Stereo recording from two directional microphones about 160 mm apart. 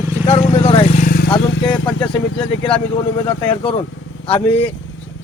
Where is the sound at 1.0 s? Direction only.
65° left (ahead or behind).